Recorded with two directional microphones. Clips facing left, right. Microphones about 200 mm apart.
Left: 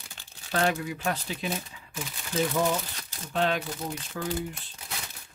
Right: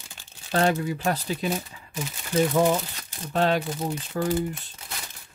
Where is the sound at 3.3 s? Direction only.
40° right (ahead or behind).